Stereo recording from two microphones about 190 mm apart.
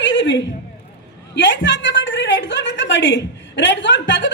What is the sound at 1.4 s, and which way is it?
A woman's voice, 70° left (ahead or behind).